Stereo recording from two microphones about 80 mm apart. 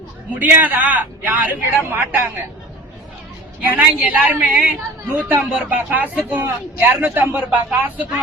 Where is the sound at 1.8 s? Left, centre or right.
Right.